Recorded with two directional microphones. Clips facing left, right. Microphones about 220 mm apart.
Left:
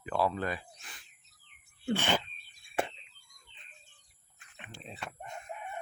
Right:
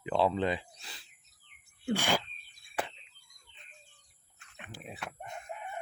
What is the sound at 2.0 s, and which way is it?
Speech, 10° right (ahead or behind).